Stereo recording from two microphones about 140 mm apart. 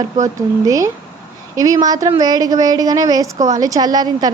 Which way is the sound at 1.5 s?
25° right (ahead or behind).